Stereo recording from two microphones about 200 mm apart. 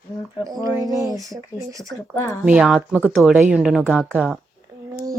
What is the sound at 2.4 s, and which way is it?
Speech, 5° right (ahead or behind).